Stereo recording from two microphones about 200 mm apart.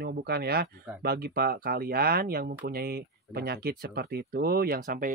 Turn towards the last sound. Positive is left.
turn(degrees=-45)  # may be behind; listen again after turning